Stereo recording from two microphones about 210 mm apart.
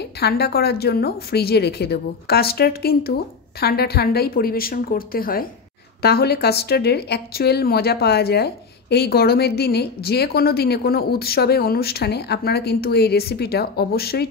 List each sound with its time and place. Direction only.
0.2 s speech: 50° left (ahead or behind)